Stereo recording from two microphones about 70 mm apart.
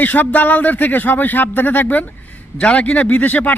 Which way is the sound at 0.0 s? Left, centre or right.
Left.